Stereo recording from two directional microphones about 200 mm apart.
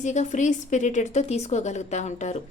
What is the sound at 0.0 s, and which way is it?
A woman's voice, 35° left (ahead or behind).